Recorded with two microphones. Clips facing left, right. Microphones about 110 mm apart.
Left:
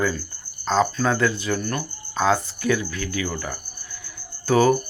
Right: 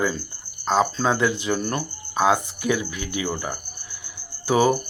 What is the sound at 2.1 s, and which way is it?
Cricket, 15° right (ahead or behind).